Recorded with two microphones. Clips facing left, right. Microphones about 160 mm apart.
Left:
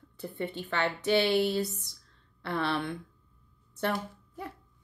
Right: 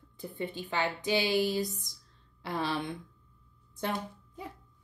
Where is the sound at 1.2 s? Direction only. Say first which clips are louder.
Left 2 dB; 65° left (ahead or behind).